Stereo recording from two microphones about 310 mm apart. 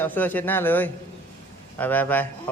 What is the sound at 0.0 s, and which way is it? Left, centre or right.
Speech, centre.